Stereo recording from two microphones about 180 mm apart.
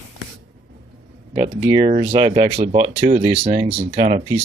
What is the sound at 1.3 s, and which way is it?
Speech, 30° right (ahead or behind).